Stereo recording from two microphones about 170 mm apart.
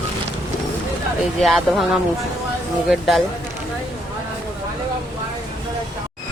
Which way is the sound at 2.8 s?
Centre (ahead or behind).